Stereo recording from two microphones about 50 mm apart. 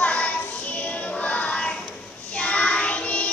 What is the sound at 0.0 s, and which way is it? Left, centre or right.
Child singing, left.